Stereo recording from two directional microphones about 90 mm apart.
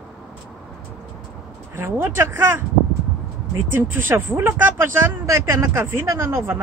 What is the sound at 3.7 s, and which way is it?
Speech, 25° right (ahead or behind).